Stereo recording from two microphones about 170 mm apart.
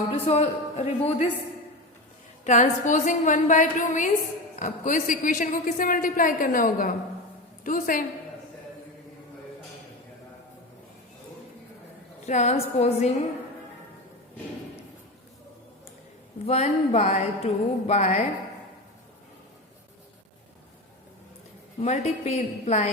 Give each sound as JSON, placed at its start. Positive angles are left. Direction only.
{"t": 0.3, "sound": "a woman's voice", "side_deg": 40}
{"t": 2.4, "sound": "a man's voice", "side_deg": 45}
{"t": 12.2, "sound": "a woman's voice", "side_deg": 45}
{"t": 16.5, "sound": "a woman's voice", "side_deg": 40}
{"t": 21.8, "sound": "a woman's voice", "side_deg": 40}